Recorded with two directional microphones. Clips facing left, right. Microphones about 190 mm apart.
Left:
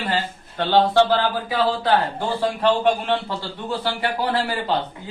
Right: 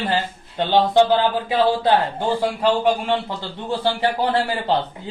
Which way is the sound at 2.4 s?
10° right (ahead or behind).